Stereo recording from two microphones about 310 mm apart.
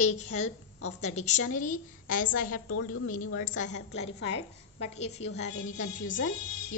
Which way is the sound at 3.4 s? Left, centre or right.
Left.